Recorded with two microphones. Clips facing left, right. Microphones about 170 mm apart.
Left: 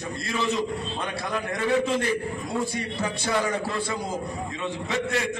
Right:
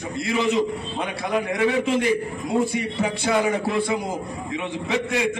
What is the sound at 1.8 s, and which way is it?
A man's voice, 15° right (ahead or behind).